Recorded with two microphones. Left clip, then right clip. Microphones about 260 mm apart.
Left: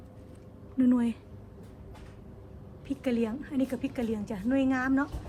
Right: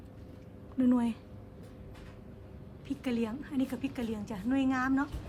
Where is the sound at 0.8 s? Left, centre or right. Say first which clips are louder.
Left 3 dB; centre.